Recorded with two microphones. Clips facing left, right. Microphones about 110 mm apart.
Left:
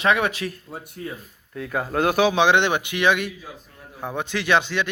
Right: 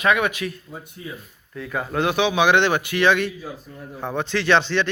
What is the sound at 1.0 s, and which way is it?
Speech, 65° left (ahead or behind).